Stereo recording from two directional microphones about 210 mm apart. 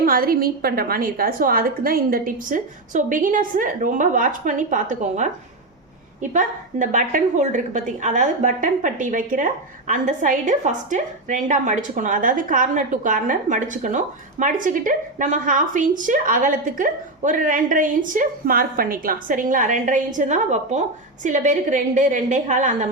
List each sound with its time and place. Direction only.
0.0 s a woman's voice: 45° right (ahead or behind)
6.3 s a woman's voice: 35° right (ahead or behind)